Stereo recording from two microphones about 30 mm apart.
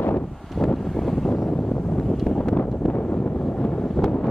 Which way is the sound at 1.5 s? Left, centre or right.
Left.